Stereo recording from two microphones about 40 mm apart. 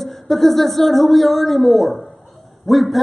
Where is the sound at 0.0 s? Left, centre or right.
Centre.